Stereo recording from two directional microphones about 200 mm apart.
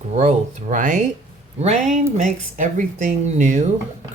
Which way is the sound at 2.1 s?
40° right (ahead or behind).